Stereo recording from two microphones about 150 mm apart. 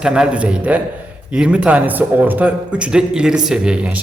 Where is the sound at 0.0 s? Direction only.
5° right (ahead or behind).